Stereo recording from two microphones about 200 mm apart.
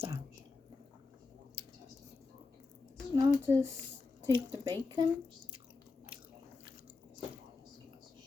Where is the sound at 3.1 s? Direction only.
15° right (ahead or behind).